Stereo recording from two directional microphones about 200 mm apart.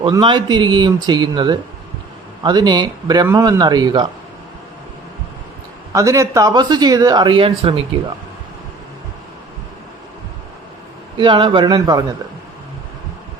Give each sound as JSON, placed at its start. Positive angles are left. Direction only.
{"t": 0.0, "sound": "speech", "side_deg": -25}
{"t": 5.9, "sound": "speech", "side_deg": -15}
{"t": 11.2, "sound": "speech", "side_deg": -25}